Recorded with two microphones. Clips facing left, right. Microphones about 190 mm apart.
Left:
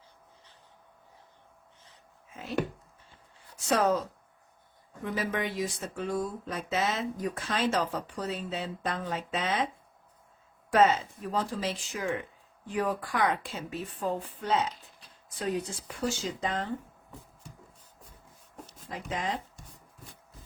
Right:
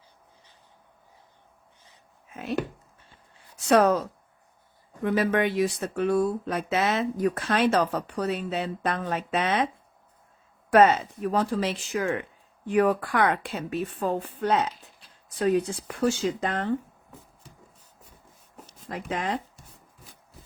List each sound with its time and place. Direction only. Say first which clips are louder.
2.3 s speech: right 7 dB; 65° right (ahead or behind)
3.7 s speech: right 6 dB; 65° right (ahead or behind)
5.0 s speech: right 8 dB; 65° right (ahead or behind)
10.7 s speech: right 5 dB; 65° right (ahead or behind)
18.6 s speech: right 4 dB; 65° right (ahead or behind)